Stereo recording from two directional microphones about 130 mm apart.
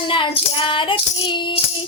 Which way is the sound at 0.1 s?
40° left (ahead or behind).